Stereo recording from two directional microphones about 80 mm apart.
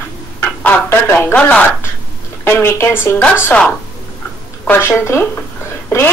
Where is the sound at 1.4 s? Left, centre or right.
Centre.